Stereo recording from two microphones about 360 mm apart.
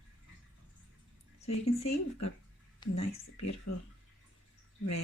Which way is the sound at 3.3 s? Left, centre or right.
Left.